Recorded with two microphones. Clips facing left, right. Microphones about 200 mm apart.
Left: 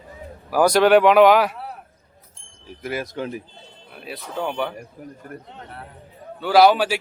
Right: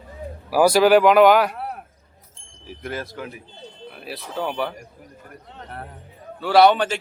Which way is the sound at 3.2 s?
25° left (ahead or behind).